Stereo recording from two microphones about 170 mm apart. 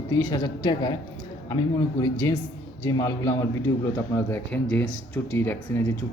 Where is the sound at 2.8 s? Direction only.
20° left (ahead or behind).